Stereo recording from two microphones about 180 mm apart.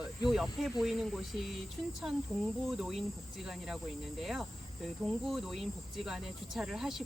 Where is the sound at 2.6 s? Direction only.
Centre (ahead or behind).